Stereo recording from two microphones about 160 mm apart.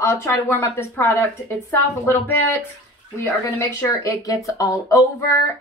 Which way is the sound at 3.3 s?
20° left (ahead or behind).